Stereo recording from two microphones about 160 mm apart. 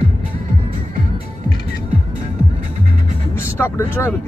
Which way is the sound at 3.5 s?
15° left (ahead or behind).